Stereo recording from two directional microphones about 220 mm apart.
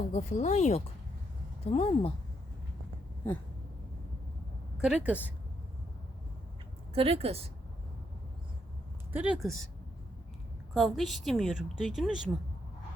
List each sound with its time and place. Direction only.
0.1 s speech: 30° left (ahead or behind)
4.8 s a woman's voice: 5° right (ahead or behind)
6.9 s a woman's voice: 25° right (ahead or behind)
9.1 s a woman's voice: 5° right (ahead or behind)
10.8 s a woman's voice: centre (ahead or behind)